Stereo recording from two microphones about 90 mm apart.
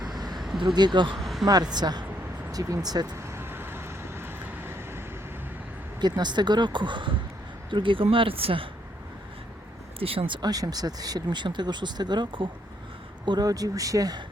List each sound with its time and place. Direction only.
0.3 s a sound: 5° right (ahead or behind)
0.8 s speech: 55° right (ahead or behind)
1.1 s a sound: centre (ahead or behind)
1.5 s speech: 45° right (ahead or behind)
3.2 s vehicle: 30° right (ahead or behind)
6.0 s speech: 55° right (ahead or behind); by 8.7 s 85° right
10.0 s speech: 90° right; by 10.5 s 65° right (ahead or behind)
10.5 s speech: 45° right (ahead or behind); by 12.5 s 60° right (ahead or behind)
13.2 s speech: 50° right (ahead or behind)